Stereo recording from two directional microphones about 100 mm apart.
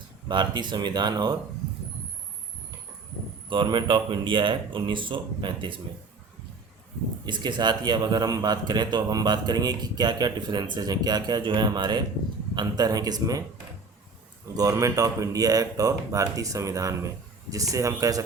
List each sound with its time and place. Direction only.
0.3 s a man's voice: 50° right (ahead or behind)
3.5 s speech: 50° right (ahead or behind)
7.3 s a man's voice: 50° right (ahead or behind)
14.5 s speech: 35° right (ahead or behind)